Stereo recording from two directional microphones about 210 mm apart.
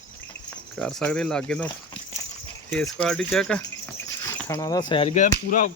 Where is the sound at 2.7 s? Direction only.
5° left (ahead or behind); by 5.1 s 25° left (ahead or behind).